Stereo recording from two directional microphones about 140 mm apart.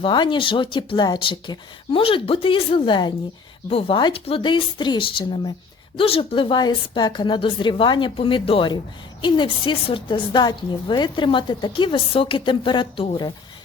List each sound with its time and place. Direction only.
0.0 s a woman's voice: 35° left (ahead or behind)